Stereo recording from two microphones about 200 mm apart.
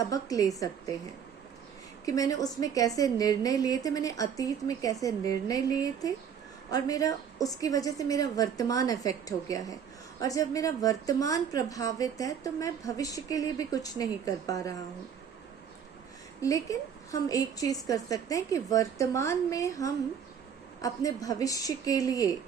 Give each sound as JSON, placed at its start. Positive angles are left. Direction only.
{"t": 0.1, "sound": "a woman's voice", "side_deg": 15}
{"t": 2.0, "sound": "a woman's voice", "side_deg": 15}
{"t": 16.4, "sound": "a woman's voice", "side_deg": 15}